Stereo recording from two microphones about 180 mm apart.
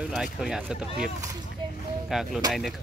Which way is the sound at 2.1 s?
Centre (ahead or behind).